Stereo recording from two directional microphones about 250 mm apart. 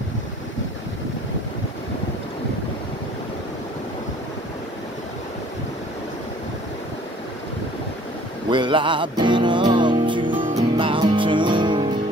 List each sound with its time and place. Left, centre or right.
8.5 s music: centre